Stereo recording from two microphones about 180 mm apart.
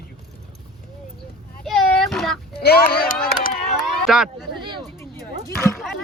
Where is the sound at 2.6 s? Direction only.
60° left (ahead or behind).